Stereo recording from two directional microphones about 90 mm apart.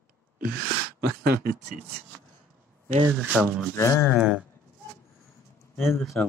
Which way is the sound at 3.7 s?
35° left (ahead or behind).